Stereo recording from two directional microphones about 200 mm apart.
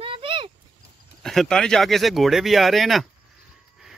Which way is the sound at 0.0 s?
25° right (ahead or behind).